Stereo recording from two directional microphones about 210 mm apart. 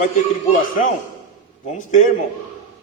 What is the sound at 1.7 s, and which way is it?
Speech, 40° left (ahead or behind).